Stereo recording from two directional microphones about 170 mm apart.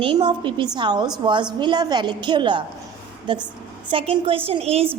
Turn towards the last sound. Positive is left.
turn(degrees=-35)  # may be behind; listen again after turning